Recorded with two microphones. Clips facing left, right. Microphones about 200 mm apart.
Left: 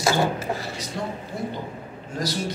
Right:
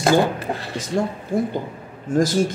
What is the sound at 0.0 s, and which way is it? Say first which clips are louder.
A man's voice: right 5 dB; 55° right (ahead or behind).